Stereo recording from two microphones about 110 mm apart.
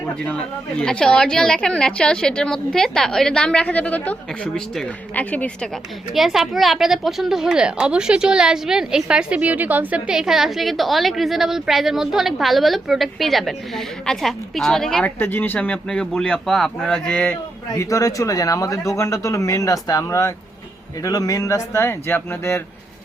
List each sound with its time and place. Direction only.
0.0 s a woman's voice: 10° left (ahead or behind)
6.1 s a woman's voice: 5° right (ahead or behind)
15.2 s a woman's voice: 20° left (ahead or behind)
17.7 s speech: 30° left (ahead or behind)